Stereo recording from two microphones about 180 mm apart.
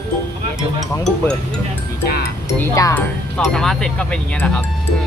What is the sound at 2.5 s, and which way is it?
Speech, 15° left (ahead or behind).